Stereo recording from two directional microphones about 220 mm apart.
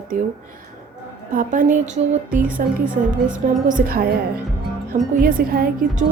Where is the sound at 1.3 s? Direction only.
35° right (ahead or behind).